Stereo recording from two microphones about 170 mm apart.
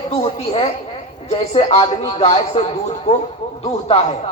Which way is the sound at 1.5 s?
35° left (ahead or behind).